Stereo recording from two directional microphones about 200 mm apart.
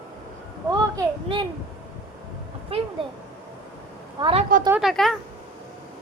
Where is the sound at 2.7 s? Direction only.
30° right (ahead or behind).